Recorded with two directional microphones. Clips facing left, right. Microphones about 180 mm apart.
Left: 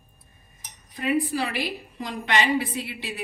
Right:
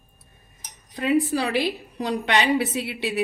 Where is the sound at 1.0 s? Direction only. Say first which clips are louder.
Right 3 dB; 75° right (ahead or behind).